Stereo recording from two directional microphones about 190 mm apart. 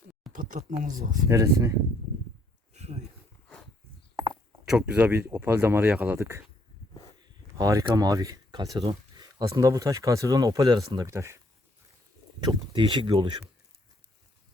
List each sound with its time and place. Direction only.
0.3 s speech: 45° right (ahead or behind)
1.3 s speech: 15° right (ahead or behind)
2.7 s a sound: 35° right (ahead or behind)
4.7 s speech: 5° right (ahead or behind)
12.4 s speech: 20° right (ahead or behind)